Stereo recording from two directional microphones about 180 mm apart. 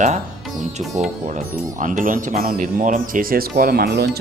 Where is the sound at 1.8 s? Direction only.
45° right (ahead or behind); by 4.2 s 65° right (ahead or behind).